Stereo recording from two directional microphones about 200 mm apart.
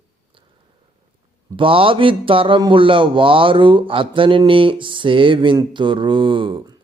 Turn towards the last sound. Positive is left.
turn(degrees=-25)  # may be behind; listen again after turning